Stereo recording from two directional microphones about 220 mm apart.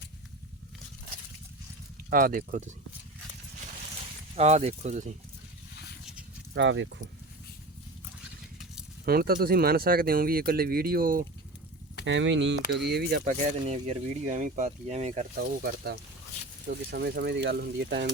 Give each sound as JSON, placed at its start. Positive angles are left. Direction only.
{"t": 2.0, "sound": "speech", "side_deg": -40}
{"t": 4.4, "sound": "speech", "side_deg": -30}
{"t": 6.5, "sound": "speech", "side_deg": -55}
{"t": 9.0, "sound": "speech", "side_deg": -45}
{"t": 12.0, "sound": "speech", "side_deg": -55}
{"t": 15.4, "sound": "speech", "side_deg": -45}